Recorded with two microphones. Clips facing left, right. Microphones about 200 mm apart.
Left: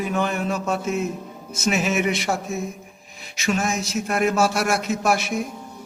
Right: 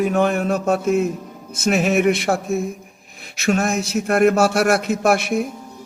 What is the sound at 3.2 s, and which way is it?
Speech, 55° right (ahead or behind).